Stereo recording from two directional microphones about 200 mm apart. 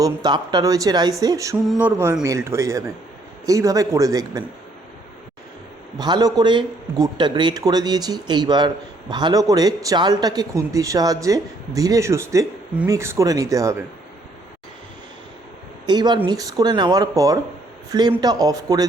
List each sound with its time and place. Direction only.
0.0 s a man's voice: 20° right (ahead or behind)
1.6 s a sound: centre (ahead or behind)
2.2 s speech: 15° right (ahead or behind)
6.0 s a man's voice: 20° right (ahead or behind)
15.9 s a man's voice: 20° right (ahead or behind)